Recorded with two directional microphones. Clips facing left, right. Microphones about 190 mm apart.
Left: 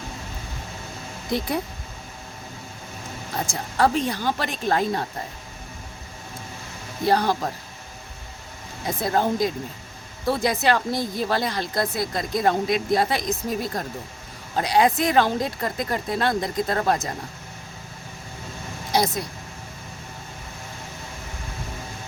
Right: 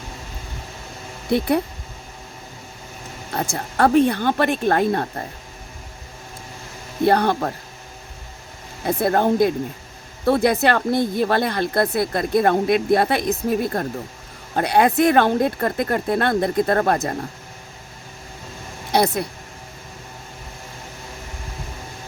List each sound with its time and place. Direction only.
1.3 s speech: 60° right (ahead or behind)
3.3 s speech: 60° right (ahead or behind)
7.0 s speech: 60° right (ahead or behind)
9.0 s speech: 55° right (ahead or behind)
18.9 s speech: 60° right (ahead or behind)